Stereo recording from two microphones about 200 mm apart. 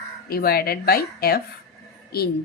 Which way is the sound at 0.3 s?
50° left (ahead or behind).